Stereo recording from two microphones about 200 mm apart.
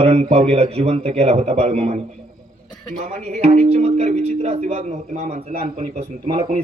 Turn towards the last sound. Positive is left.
turn(degrees=-35)  # may be behind; listen again after turning